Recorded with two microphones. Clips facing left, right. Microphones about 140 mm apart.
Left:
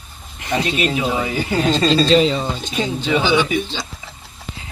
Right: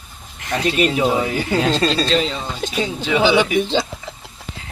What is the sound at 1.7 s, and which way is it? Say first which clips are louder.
Speech: left 4 dB; centre (ahead or behind).